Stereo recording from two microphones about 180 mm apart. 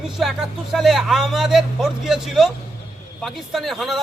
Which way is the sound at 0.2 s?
Centre (ahead or behind).